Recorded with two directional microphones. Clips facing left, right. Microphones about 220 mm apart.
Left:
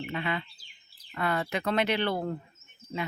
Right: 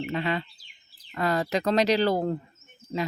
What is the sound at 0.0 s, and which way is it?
Speech, 40° right (ahead or behind).